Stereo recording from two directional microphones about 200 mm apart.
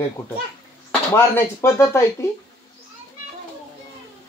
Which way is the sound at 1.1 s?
15° left (ahead or behind).